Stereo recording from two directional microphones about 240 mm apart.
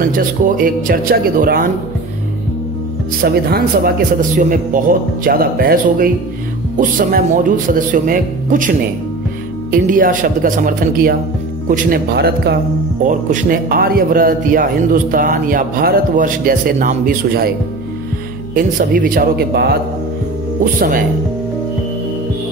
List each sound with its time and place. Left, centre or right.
0.0 s a man's voice: right
3.2 s a man's voice: right
18.5 s a man's voice: right